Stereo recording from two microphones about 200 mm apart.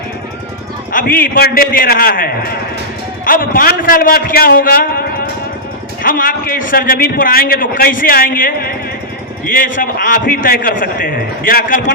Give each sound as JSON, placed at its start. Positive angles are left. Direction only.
{"t": 0.9, "sound": "a man's voice", "side_deg": 45}
{"t": 6.0, "sound": "a man's voice", "side_deg": 45}